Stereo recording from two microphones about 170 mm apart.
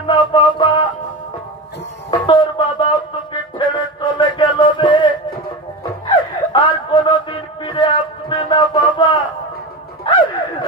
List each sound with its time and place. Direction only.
0.0 s music: 30° left (ahead or behind)
2.0 s music: 30° left (ahead or behind)
6.0 s a sound: 30° left (ahead or behind)